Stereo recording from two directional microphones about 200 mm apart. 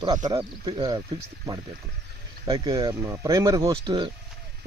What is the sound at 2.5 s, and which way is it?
Speech, 20° right (ahead or behind).